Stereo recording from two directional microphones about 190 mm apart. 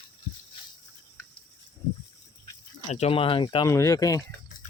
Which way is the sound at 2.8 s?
35° left (ahead or behind).